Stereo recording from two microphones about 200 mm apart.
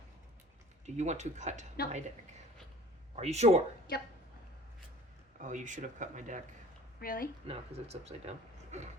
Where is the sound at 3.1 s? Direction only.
35° right (ahead or behind).